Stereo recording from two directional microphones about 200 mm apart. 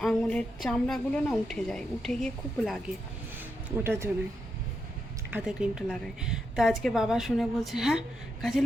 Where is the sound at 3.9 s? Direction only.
15° right (ahead or behind).